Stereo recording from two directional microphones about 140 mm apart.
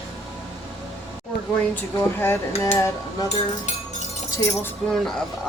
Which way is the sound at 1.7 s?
15° left (ahead or behind).